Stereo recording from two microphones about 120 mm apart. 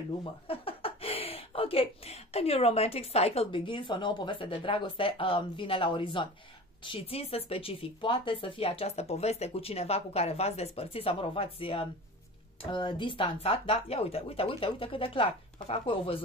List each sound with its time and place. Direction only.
0.2 s speech: 50° left (ahead or behind)